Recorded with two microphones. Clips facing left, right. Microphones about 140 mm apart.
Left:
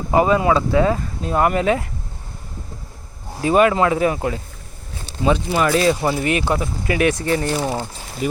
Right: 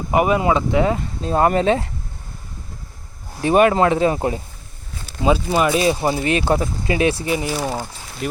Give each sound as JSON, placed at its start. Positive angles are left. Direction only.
{"t": 0.1, "sound": "speech", "side_deg": -20}
{"t": 3.4, "sound": "speech", "side_deg": -25}
{"t": 5.6, "sound": "speech", "side_deg": -20}
{"t": 7.2, "sound": "speech", "side_deg": -10}